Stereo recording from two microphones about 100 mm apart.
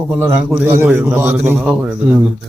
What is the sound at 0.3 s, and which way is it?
A man's voice, 20° right (ahead or behind).